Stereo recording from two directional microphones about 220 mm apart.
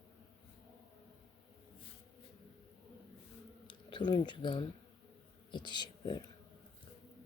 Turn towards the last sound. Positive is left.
turn(degrees=20)  # may be behind; listen again after turning